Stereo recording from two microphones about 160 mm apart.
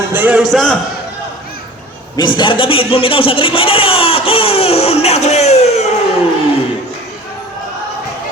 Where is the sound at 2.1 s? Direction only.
30° left (ahead or behind).